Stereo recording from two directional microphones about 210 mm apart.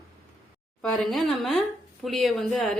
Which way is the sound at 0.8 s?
Centre (ahead or behind).